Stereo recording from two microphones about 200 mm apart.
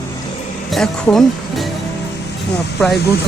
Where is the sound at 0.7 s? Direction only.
Centre (ahead or behind).